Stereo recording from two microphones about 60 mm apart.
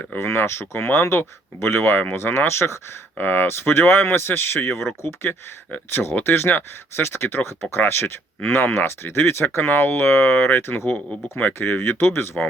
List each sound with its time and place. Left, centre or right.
0.2 s speech: left
3.2 s speech: left
5.3 s speech: left
5.9 s speech: left
11.3 s speech: left